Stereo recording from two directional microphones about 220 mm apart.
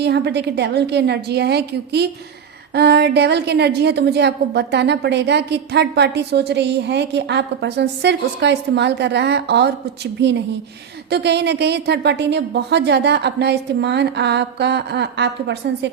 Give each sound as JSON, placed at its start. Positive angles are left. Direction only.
{"t": 0.0, "sound": "a woman's voice", "side_deg": -50}